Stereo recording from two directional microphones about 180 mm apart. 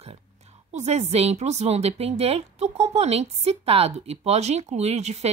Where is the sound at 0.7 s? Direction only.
40° right (ahead or behind).